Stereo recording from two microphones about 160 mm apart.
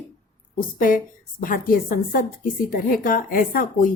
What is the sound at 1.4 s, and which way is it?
Speech, 60° left (ahead or behind).